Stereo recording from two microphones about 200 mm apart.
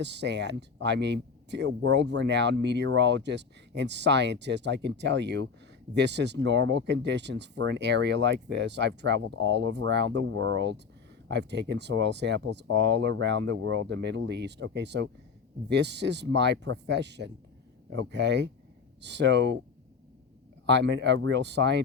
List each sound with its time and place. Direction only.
0.0 s speech: 60° right (ahead or behind)
20.7 s speech: 60° right (ahead or behind)